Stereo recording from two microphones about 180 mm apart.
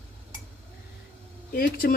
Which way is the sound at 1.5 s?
55° left (ahead or behind).